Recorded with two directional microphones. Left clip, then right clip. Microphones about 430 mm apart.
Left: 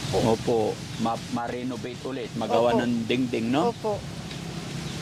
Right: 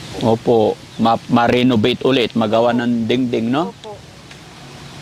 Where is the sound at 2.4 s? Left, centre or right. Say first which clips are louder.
Right 1 dB; right.